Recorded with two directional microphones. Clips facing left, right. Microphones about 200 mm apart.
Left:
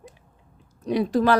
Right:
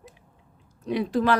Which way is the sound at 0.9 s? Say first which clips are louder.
Left 3 dB; 40° left (ahead or behind).